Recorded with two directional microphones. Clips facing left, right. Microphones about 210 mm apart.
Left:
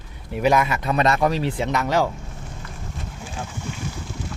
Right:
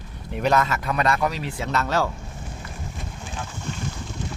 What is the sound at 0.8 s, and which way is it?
Speech, 25° left (ahead or behind).